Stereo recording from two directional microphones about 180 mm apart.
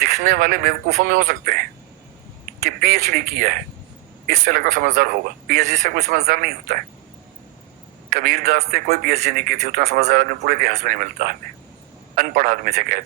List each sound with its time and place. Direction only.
0.0 s speech: 50° right (ahead or behind)
2.6 s speech: 55° right (ahead or behind)
8.1 s a man's voice: 55° right (ahead or behind)
10.1 s speech: 55° right (ahead or behind)